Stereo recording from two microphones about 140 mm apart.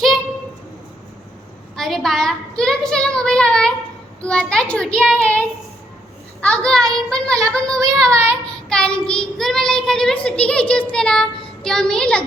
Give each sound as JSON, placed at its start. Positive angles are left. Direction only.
{"t": 1.7, "sound": "a child's voice", "side_deg": 5}
{"t": 4.2, "sound": "child singing", "side_deg": 5}
{"t": 6.4, "sound": "a child's voice", "side_deg": 5}
{"t": 8.1, "sound": "child singing", "side_deg": -20}
{"t": 8.7, "sound": "child singing", "side_deg": 5}